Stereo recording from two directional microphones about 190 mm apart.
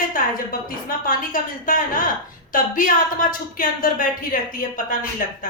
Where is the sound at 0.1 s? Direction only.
45° left (ahead or behind).